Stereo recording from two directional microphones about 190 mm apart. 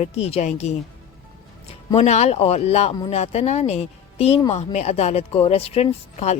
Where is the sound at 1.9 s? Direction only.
35° left (ahead or behind).